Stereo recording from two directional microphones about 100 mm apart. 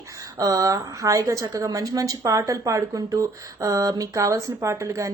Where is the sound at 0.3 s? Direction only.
35° right (ahead or behind).